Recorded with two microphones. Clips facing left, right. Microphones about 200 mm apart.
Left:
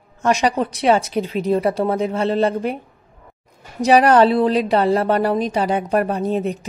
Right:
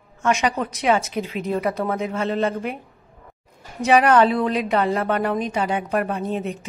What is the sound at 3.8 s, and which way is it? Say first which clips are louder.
A woman's voice: left 3 dB; 35° left (ahead or behind).